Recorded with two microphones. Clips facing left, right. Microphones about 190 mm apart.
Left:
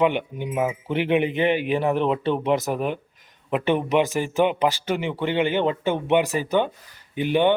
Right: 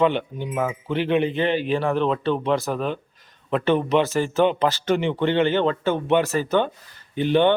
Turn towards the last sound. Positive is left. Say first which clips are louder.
# right 1 dB
turn(degrees=10)  # may be behind; listen again after turning